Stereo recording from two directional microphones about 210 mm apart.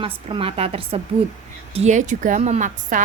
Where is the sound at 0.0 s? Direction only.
25° right (ahead or behind).